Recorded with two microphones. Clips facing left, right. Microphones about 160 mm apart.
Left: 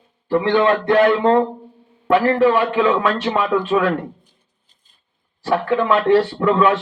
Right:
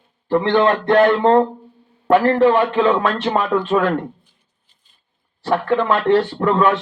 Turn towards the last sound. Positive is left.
turn(degrees=-45)  # may be behind; listen again after turning